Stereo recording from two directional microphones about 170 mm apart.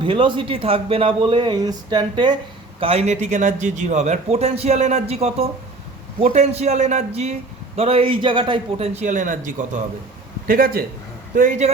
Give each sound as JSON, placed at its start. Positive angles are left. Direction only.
{"t": 0.0, "sound": "speech", "side_deg": -30}
{"t": 2.8, "sound": "a man's voice", "side_deg": -40}
{"t": 11.3, "sound": "speech", "side_deg": -45}